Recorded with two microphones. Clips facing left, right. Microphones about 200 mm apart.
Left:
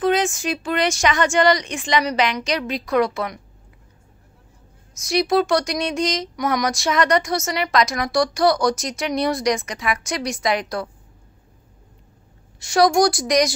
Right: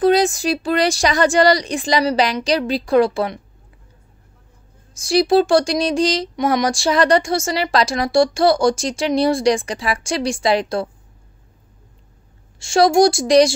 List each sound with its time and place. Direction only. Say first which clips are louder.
0.0 s a woman's voice: right 5 dB; 35° right (ahead or behind)
4.9 s speech: right 4 dB; 30° right (ahead or behind)
12.5 s speech: right 3 dB; 25° right (ahead or behind)